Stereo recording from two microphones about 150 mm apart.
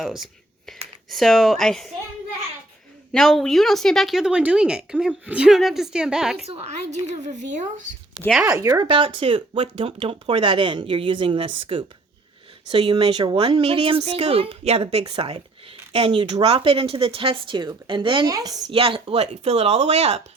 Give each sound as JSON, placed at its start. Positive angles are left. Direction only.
{"t": 1.1, "sound": "a woman's voice", "side_deg": 0}
{"t": 3.1, "sound": "a woman's voice", "side_deg": 5}
{"t": 6.4, "sound": "speech", "side_deg": -45}
{"t": 7.1, "sound": "a woman's voice", "side_deg": -55}
{"t": 8.3, "sound": "a woman's voice", "side_deg": -5}
{"t": 8.5, "sound": "a woman's voice", "side_deg": -20}
{"t": 8.9, "sound": "speech", "side_deg": -35}
{"t": 18.7, "sound": "speech", "side_deg": -35}